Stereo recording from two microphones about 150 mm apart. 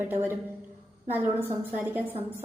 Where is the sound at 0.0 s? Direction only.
15° right (ahead or behind).